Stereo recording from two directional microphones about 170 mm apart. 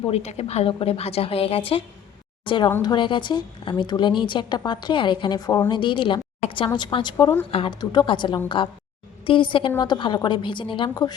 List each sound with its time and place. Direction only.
0.1 s a woman's voice: 40° left (ahead or behind)
2.8 s speech: 30° left (ahead or behind)